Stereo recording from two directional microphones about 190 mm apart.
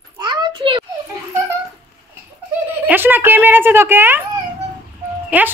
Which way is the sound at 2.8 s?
10° right (ahead or behind).